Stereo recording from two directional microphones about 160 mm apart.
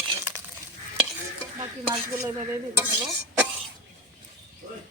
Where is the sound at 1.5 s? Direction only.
25° right (ahead or behind).